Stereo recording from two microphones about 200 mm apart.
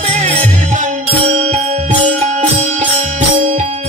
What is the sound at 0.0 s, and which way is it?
Music, 35° right (ahead or behind).